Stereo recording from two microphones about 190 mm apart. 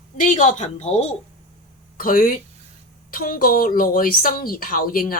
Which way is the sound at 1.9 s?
50° left (ahead or behind).